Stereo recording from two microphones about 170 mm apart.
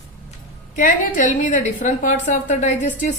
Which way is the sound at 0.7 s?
50° left (ahead or behind).